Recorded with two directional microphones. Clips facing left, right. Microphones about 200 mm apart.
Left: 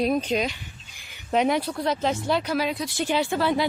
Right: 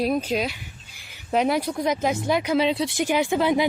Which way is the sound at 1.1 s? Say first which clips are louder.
Even; centre (ahead or behind).